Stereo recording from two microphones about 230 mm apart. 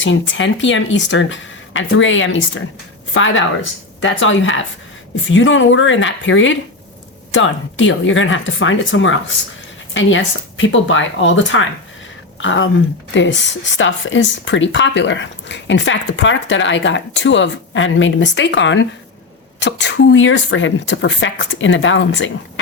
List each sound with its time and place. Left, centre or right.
0.0 s speech: left